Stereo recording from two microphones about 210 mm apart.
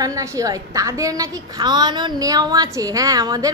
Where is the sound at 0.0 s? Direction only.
15° right (ahead or behind).